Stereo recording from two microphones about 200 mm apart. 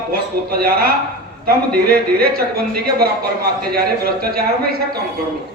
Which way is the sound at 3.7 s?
50° right (ahead or behind).